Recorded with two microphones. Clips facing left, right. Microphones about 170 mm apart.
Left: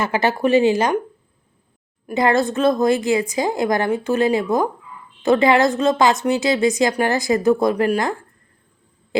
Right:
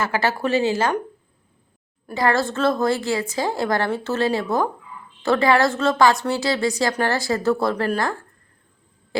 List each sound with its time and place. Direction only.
0.0 s a woman's voice: 20° left (ahead or behind)
2.0 s a woman's voice: 20° left (ahead or behind)